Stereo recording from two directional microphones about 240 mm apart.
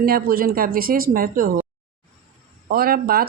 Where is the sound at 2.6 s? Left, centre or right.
Right.